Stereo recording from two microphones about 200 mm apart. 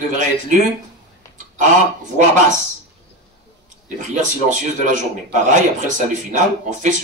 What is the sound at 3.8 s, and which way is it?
A man's voice, 40° right (ahead or behind).